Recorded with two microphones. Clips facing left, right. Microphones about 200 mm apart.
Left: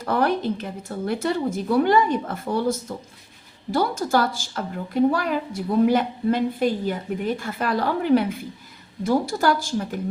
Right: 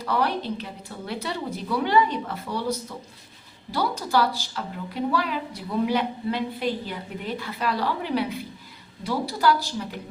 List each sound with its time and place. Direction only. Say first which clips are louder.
0.0 s a woman's voice: left 4 dB; 50° left (ahead or behind)